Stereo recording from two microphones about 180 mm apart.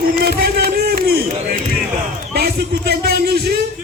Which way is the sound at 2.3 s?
60° right (ahead or behind).